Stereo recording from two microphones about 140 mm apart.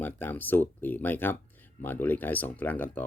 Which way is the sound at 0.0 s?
15° left (ahead or behind).